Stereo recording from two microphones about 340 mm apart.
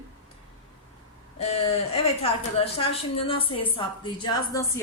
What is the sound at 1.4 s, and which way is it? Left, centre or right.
A woman's voice, centre.